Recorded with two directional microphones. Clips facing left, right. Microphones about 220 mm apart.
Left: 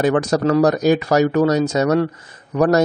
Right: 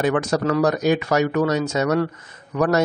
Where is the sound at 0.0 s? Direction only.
35° left (ahead or behind).